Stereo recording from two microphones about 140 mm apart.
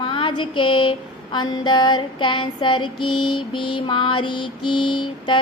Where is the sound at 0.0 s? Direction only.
35° left (ahead or behind).